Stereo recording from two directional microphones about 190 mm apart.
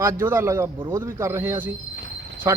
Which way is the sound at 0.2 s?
15° right (ahead or behind).